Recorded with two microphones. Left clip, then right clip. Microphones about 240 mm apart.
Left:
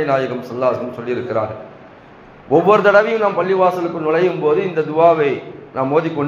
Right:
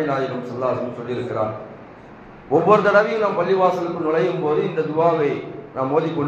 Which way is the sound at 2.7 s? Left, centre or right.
Left.